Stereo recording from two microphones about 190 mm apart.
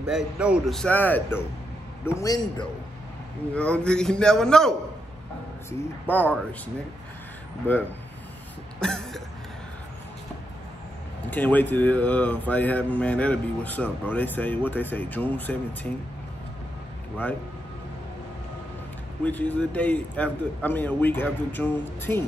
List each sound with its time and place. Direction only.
0.0 s a man's voice: 5° right (ahead or behind)
2.1 s a man's voice: 20° left (ahead or behind)
3.5 s a man's voice: 5° left (ahead or behind)
8.8 s a man's voice: 5° left (ahead or behind)
11.2 s speech: 10° left (ahead or behind)
19.2 s speech: 10° left (ahead or behind)